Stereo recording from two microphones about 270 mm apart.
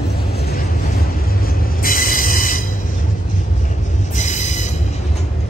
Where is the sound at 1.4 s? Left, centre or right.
Left.